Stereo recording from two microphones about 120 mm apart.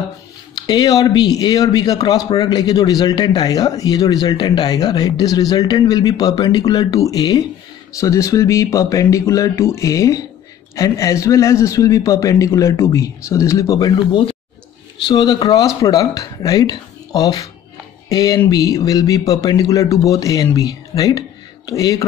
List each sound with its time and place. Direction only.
0.6 s a man's voice: 35° left (ahead or behind)